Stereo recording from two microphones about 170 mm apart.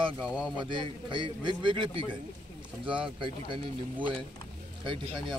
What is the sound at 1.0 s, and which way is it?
Speech, 30° right (ahead or behind).